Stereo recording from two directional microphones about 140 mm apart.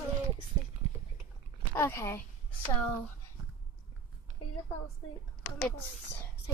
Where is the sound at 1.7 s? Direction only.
15° left (ahead or behind).